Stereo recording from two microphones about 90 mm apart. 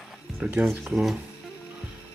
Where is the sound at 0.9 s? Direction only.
5° right (ahead or behind).